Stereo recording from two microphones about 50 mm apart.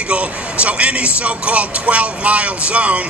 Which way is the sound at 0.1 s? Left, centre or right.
Right.